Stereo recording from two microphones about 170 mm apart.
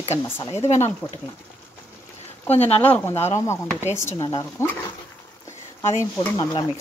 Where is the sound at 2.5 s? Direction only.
35° left (ahead or behind).